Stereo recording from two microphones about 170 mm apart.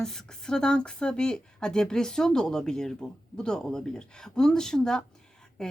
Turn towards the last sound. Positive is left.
turn(degrees=5)  # may be behind; listen again after turning